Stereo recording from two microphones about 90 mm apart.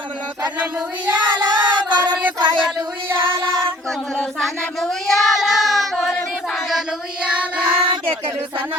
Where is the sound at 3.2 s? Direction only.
55° right (ahead or behind).